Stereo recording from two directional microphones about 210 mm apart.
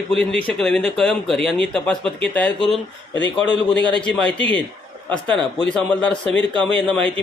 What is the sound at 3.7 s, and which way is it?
Speech, 5° left (ahead or behind).